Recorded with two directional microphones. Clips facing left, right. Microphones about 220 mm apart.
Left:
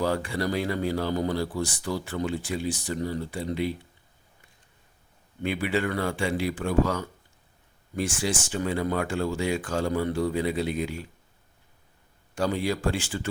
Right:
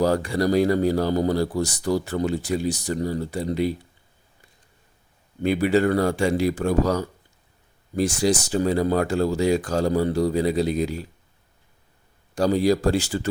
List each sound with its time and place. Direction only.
0.0 s speech: 40° right (ahead or behind)
5.4 s speech: 40° right (ahead or behind)
12.3 s speech: 40° right (ahead or behind)